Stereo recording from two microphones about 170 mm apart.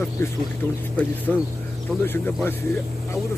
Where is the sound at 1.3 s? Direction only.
5° left (ahead or behind).